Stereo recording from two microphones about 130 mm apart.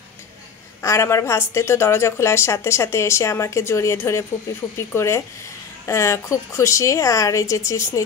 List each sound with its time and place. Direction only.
0.8 s a woman's voice: 20° left (ahead or behind)